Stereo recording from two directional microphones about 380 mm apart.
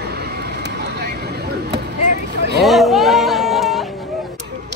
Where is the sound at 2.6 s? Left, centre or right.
Centre.